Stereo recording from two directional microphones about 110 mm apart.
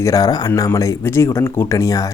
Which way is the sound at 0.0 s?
35° left (ahead or behind).